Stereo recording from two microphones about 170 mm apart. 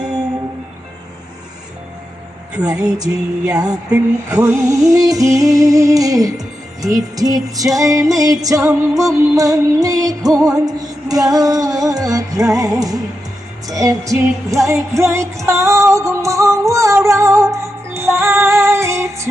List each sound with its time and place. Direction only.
2.5 s a woman's voice: 5° right (ahead or behind)
2.7 s music: 20° right (ahead or behind)